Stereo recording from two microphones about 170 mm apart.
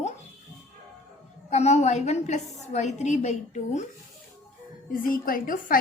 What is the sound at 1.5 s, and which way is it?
A woman's voice, 40° left (ahead or behind).